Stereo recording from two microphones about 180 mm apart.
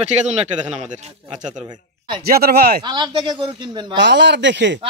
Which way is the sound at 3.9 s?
75° right (ahead or behind).